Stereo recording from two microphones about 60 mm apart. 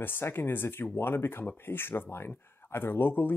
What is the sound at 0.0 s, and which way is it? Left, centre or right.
Speech, left.